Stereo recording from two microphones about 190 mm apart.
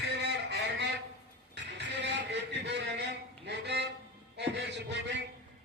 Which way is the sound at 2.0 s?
65° right (ahead or behind).